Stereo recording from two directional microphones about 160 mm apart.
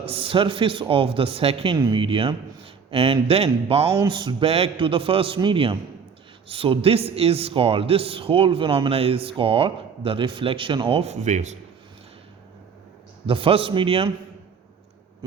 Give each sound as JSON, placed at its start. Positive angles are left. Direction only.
{"t": 0.0, "sound": "a man's voice", "side_deg": -35}
{"t": 13.2, "sound": "a man's voice", "side_deg": -35}